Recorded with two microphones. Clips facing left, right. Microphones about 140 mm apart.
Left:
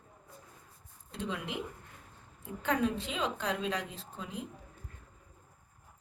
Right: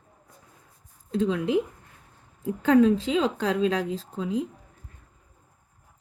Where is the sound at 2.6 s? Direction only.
90° right.